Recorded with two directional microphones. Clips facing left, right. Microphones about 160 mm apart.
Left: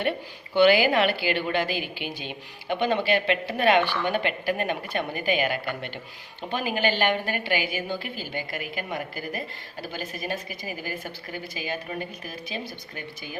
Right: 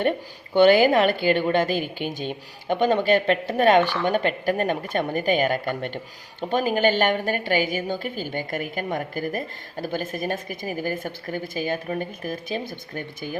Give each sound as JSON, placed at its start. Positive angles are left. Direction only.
{"t": 0.5, "sound": "a woman's voice", "side_deg": -45}